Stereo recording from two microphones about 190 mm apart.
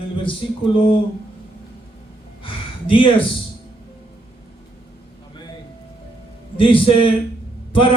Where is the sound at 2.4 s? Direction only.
30° left (ahead or behind).